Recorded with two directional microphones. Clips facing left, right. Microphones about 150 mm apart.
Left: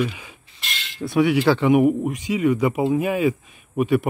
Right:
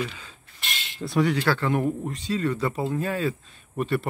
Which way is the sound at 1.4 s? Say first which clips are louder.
Left 8 dB; 15° left (ahead or behind).